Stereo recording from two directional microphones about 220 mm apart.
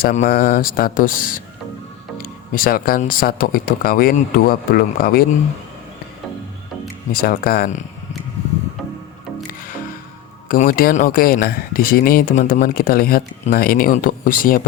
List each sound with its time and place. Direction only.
0.0 s speech: 35° left (ahead or behind)
7.1 s speech: 40° left (ahead or behind)
10.5 s speech: 40° left (ahead or behind)